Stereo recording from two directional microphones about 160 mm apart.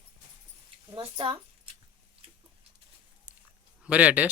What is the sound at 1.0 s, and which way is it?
Speech, 35° right (ahead or behind).